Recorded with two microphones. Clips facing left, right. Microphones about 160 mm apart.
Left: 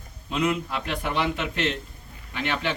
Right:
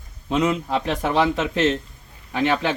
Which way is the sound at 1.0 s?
90° right.